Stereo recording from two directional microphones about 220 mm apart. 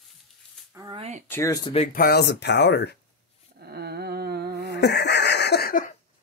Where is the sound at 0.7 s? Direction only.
15° right (ahead or behind).